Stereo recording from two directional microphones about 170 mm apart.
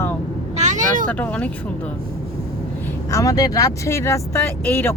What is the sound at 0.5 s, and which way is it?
Vehicle, 45° right (ahead or behind).